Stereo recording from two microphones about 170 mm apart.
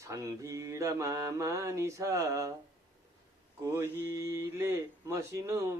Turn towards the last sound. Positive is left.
turn(degrees=-15)  # may be behind; listen again after turning